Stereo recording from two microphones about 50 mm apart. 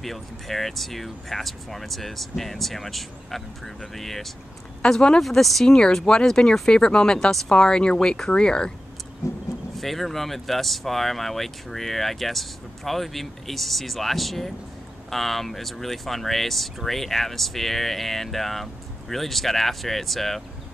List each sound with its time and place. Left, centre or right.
0.0 s speech: centre
5.2 s speech: centre
9.2 s vehicle: left
9.8 s speech: centre